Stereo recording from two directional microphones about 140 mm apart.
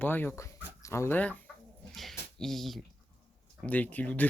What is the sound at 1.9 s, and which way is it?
Speech, centre (ahead or behind).